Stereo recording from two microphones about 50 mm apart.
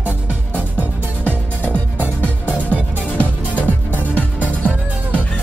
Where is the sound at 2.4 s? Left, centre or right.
Right.